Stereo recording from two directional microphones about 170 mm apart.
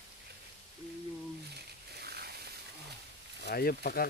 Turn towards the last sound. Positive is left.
turn(degrees=60)  # may be behind; listen again after turning